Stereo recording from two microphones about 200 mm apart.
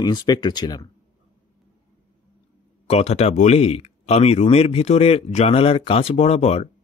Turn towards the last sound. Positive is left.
turn(degrees=30)  # may be behind; listen again after turning